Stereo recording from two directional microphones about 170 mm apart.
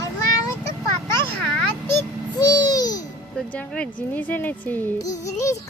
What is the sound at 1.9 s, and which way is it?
A child's voice, 20° left (ahead or behind).